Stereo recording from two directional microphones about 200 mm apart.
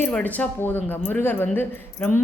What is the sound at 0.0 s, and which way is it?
A woman's voice, 10° left (ahead or behind).